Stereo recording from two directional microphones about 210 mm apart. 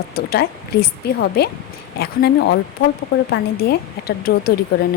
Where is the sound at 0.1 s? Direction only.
45° left (ahead or behind).